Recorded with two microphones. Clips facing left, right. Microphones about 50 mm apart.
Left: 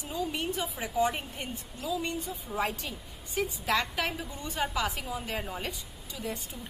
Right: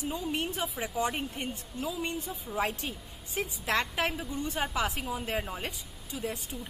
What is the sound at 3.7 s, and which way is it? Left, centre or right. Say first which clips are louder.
Speech: right 1 dB; right.